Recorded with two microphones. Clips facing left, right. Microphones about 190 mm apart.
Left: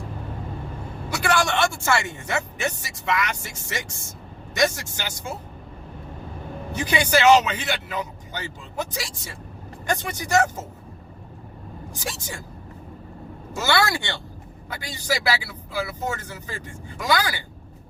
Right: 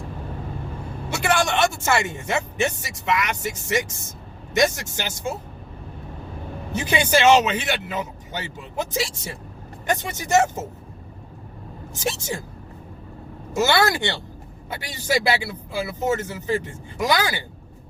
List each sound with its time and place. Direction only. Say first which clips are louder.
1.1 s speech: right 1 dB; 20° right (ahead or behind)
6.7 s speech: right 1 dB; 25° right (ahead or behind)
11.9 s speech: right 8 dB; 25° right (ahead or behind)
13.5 s speech: right 3 dB; 20° right (ahead or behind)